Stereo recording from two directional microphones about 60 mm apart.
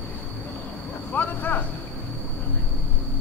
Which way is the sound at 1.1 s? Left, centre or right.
Left.